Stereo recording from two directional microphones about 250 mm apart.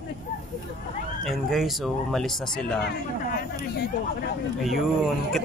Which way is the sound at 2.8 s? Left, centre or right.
Left.